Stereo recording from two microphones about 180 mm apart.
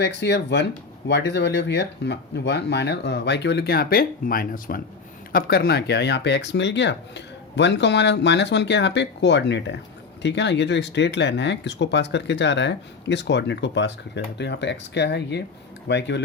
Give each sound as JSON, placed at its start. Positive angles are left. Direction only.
{"t": 0.0, "sound": "speech", "side_deg": 70}